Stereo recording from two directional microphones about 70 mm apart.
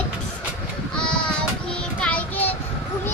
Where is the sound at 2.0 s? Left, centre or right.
Centre.